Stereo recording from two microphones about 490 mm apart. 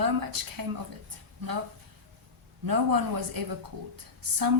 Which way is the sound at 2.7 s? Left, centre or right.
Right.